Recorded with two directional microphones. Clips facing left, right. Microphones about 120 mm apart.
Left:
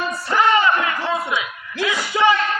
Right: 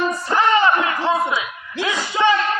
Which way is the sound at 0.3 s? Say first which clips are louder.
Even; 25° right (ahead or behind).